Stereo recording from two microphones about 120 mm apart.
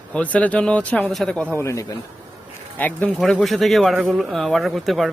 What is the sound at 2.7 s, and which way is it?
Speech, 15° left (ahead or behind).